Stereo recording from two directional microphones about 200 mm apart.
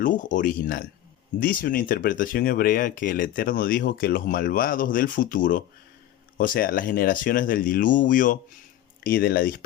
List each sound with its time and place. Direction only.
0.0 s speech: 40° left (ahead or behind)